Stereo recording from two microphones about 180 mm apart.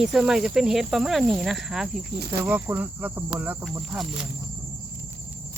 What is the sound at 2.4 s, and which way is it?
Cricket, 10° right (ahead or behind).